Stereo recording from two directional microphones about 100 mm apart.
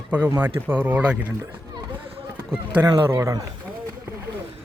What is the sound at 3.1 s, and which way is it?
Speech, 30° right (ahead or behind).